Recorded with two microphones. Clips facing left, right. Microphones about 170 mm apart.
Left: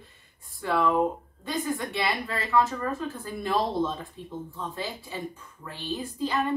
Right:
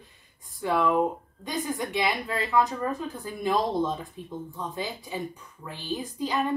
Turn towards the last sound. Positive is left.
turn(degrees=-20)  # may be behind; listen again after turning